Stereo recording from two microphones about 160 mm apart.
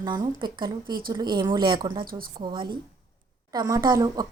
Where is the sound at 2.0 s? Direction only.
65° right (ahead or behind).